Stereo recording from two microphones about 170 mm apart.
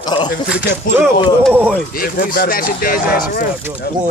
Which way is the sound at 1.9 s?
60° left (ahead or behind).